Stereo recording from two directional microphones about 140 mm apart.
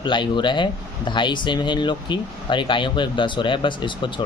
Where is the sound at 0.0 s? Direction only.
35° left (ahead or behind).